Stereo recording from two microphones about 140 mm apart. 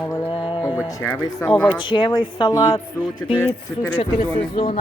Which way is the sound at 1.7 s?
35° left (ahead or behind).